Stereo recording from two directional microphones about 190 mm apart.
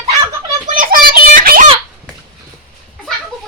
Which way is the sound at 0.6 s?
45° right (ahead or behind).